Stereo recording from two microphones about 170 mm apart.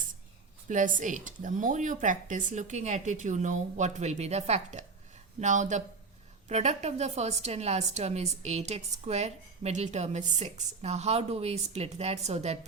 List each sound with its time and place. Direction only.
0.7 s a woman's voice: 50° right (ahead or behind)